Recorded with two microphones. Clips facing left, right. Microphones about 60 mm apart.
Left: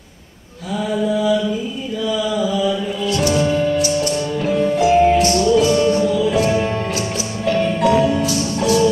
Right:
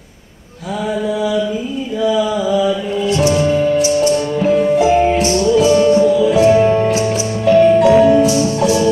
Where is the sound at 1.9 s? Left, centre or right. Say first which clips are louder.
Right 5 dB; right.